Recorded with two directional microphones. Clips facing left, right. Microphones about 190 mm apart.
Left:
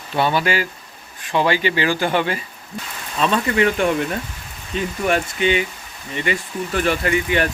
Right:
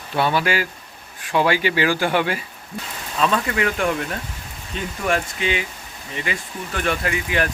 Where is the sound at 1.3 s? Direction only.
10° right (ahead or behind).